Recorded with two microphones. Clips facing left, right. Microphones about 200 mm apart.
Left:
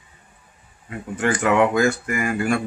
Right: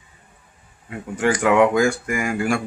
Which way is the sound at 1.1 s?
10° right (ahead or behind).